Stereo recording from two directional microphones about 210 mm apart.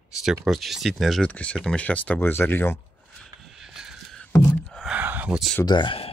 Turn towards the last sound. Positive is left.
turn(degrees=25)  # may be behind; listen again after turning